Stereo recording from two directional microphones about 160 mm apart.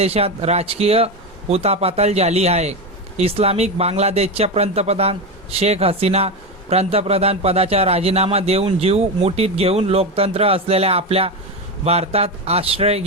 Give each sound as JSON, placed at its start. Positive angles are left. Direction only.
{"t": 0.0, "sound": "speech", "side_deg": -40}